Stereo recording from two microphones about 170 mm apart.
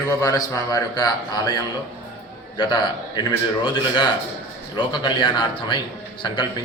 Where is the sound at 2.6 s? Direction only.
25° left (ahead or behind).